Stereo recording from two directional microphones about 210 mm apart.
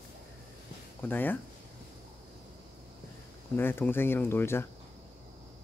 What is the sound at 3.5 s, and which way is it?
Speech, 10° left (ahead or behind).